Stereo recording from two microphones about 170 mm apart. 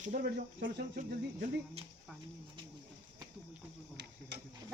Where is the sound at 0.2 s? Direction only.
70° right (ahead or behind).